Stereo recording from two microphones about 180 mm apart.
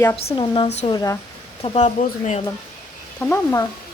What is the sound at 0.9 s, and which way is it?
Speech, 15° left (ahead or behind).